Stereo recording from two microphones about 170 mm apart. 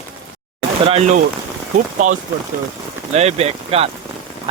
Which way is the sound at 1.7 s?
50° right (ahead or behind).